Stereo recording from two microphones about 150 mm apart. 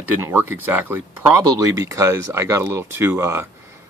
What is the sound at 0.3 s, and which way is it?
Speech, 15° right (ahead or behind).